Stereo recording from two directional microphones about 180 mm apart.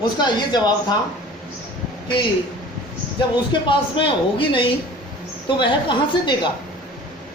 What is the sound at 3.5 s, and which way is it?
A man's voice, 25° left (ahead or behind).